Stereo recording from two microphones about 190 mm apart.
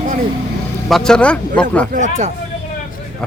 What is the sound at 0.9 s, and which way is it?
Speech, 5° left (ahead or behind).